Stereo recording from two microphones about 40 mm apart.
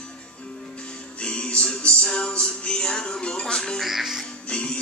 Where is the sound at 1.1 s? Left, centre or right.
Left.